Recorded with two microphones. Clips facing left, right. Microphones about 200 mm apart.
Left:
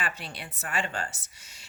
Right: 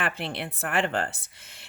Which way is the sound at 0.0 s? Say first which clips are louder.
Right 6 dB; 60° right (ahead or behind).